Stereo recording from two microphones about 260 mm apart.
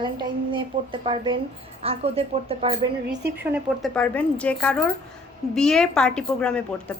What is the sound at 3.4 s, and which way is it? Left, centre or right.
A woman's voice, centre.